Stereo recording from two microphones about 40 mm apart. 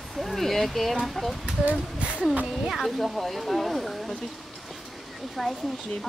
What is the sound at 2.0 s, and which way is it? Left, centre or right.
Speech, right.